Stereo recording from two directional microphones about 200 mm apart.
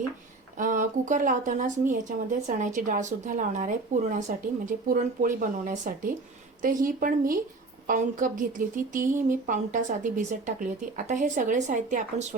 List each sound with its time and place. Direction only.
0.6 s speech: 40° right (ahead or behind)